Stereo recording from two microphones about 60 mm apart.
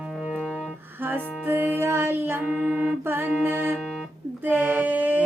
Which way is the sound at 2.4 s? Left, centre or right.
Centre.